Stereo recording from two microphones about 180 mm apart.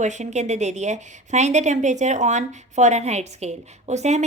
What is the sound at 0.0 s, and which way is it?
A woman's voice, 40° right (ahead or behind).